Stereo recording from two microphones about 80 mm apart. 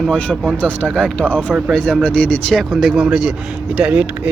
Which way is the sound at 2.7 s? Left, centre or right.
Centre.